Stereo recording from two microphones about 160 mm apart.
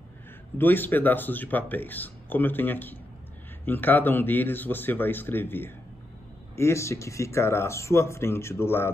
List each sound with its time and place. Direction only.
0.6 s speech: 10° left (ahead or behind)